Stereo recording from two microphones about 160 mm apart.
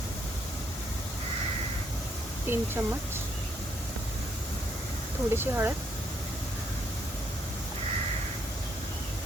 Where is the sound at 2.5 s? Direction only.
15° right (ahead or behind).